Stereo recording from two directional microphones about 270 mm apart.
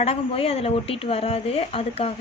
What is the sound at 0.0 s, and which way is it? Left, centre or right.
Speech, left.